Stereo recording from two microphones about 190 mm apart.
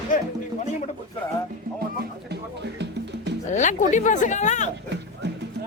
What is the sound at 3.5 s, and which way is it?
Speech, 40° left (ahead or behind).